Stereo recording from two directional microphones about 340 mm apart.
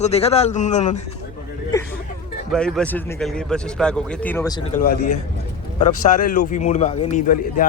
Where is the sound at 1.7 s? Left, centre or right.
Centre.